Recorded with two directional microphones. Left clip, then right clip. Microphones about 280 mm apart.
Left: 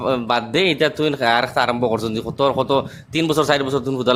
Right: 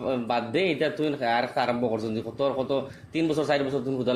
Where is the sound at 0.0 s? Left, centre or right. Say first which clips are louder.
Left 8 dB; left.